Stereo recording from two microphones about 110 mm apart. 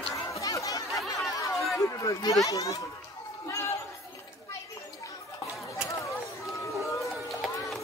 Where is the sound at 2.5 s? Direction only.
35° left (ahead or behind).